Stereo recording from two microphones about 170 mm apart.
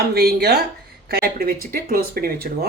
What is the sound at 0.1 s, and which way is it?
Speech, 70° right (ahead or behind).